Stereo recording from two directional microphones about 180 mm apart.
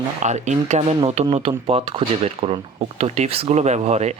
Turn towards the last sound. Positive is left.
turn(degrees=-35)  # may be behind; listen again after turning